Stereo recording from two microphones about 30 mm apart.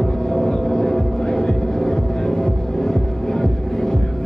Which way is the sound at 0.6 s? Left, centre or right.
Centre.